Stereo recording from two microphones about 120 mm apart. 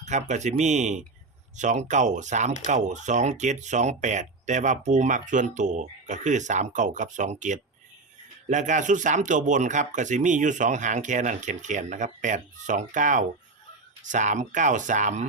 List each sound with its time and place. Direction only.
0.0 s speech: 80° right